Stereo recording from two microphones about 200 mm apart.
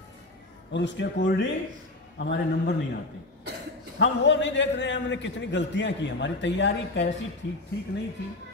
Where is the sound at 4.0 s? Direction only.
65° left (ahead or behind).